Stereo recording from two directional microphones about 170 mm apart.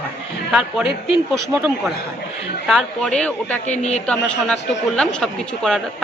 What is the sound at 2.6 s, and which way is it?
Speech, 5° left (ahead or behind).